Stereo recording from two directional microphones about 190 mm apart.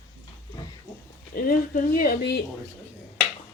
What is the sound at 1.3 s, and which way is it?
Speech, 50° left (ahead or behind).